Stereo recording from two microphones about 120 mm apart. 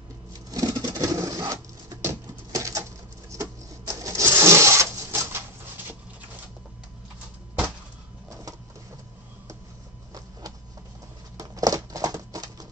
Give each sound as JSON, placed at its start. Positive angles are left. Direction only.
{"t": 0.5, "sound": "pigeon", "side_deg": -30}
{"t": 3.3, "sound": "printer", "side_deg": -25}
{"t": 8.3, "sound": "printer", "side_deg": -30}
{"t": 11.3, "sound": "patter", "side_deg": -30}